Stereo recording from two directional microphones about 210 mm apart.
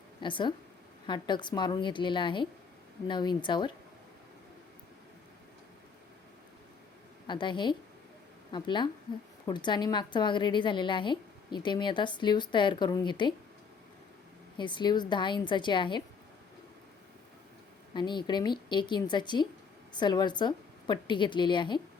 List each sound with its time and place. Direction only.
0.2 s a woman's voice: 20° left (ahead or behind)
7.3 s a woman's voice: 20° left (ahead or behind)
14.6 s a woman's voice: 20° left (ahead or behind)
17.9 s a woman's voice: 20° left (ahead or behind)